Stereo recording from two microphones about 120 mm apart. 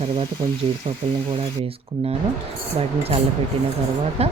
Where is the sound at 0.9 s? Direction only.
50° right (ahead or behind).